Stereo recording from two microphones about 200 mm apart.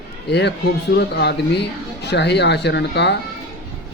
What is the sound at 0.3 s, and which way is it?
Speech, 60° left (ahead or behind).